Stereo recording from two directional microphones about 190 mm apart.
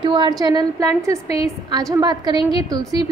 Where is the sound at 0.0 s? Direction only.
25° right (ahead or behind).